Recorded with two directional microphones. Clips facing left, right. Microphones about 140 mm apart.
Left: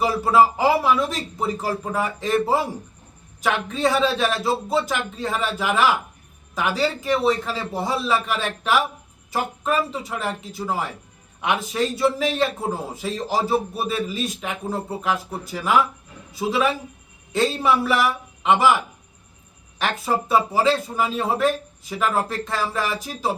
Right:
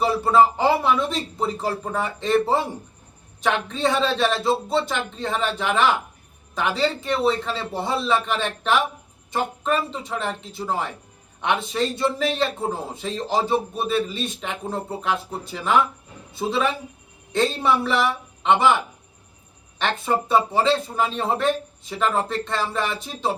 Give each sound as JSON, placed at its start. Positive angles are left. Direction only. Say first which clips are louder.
{"t": 0.0, "sound": "a man's voice", "louder": "even", "side_deg": 5}
{"t": 19.8, "sound": "a man's voice", "louder": "even", "side_deg": 5}